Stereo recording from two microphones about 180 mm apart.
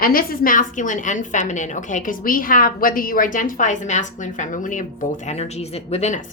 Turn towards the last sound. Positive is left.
turn(degrees=40)  # may be behind; listen again after turning